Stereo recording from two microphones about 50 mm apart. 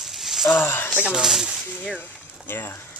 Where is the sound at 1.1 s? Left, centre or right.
Centre.